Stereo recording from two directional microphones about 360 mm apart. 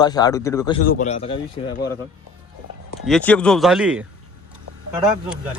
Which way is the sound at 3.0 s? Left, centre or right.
Centre.